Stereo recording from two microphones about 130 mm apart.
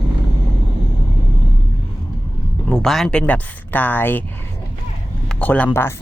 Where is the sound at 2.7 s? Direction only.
5° left (ahead or behind).